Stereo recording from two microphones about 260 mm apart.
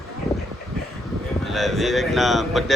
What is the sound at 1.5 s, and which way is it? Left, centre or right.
A man's voice, centre.